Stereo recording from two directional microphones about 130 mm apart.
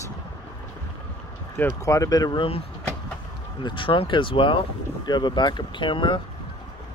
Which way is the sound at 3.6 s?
40° left (ahead or behind).